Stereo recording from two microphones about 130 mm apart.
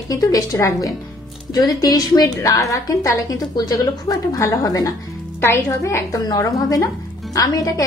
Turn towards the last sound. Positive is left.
turn(degrees=25)  # may be behind; listen again after turning